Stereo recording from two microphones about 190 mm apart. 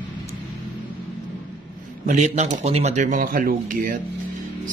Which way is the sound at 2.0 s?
40° right (ahead or behind).